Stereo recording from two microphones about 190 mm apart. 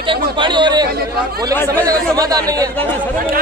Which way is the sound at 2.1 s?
20° right (ahead or behind).